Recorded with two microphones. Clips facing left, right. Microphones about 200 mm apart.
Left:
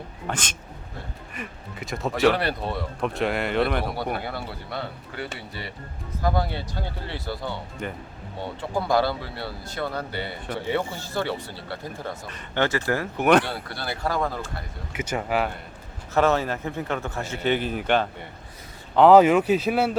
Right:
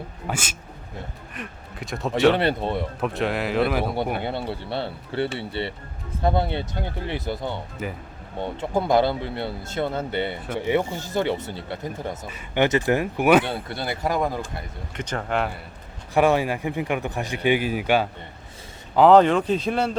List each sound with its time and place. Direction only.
0.3 s a man's voice: 5° right (ahead or behind)
2.3 s speech: 25° right (ahead or behind)
3.0 s speech: centre (ahead or behind)
4.2 s speech: 25° right (ahead or behind)
7.8 s speech: 5° right (ahead or behind)
8.4 s speech: 20° right (ahead or behind)
10.4 s a man's voice: 10° right (ahead or behind)
12.3 s a man's voice: 10° right (ahead or behind)
12.6 s a man's voice: 20° right (ahead or behind)
13.4 s speech: 20° right (ahead or behind)
14.9 s speech: 10° left (ahead or behind)
16.1 s a man's voice: 15° right (ahead or behind)
18.9 s speech: 5° left (ahead or behind)